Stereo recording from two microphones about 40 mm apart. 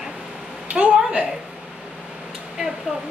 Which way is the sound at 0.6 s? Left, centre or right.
Right.